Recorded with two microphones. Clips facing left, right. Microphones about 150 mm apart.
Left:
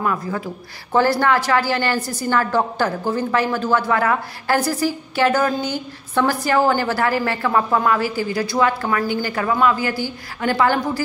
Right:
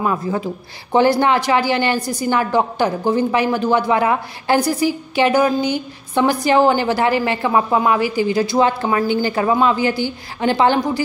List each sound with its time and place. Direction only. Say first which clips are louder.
0.0 s a woman's voice: right 3 dB; 20° right (ahead or behind)